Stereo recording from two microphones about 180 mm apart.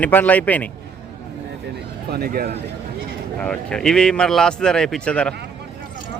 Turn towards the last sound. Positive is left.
turn(degrees=5)  # may be behind; listen again after turning